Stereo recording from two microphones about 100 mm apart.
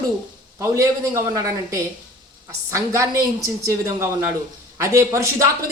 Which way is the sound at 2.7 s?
30° right (ahead or behind).